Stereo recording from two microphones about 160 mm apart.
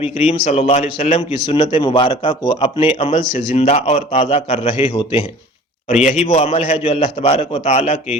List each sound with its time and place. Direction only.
0.0 s a man's voice: 40° left (ahead or behind)
2.3 s speech: 20° left (ahead or behind)
2.6 s a man's voice: 35° left (ahead or behind)